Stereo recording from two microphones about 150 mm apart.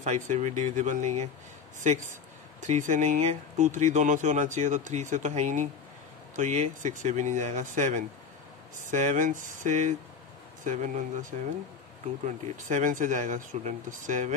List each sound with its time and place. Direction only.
0.0 s speech: 55° right (ahead or behind)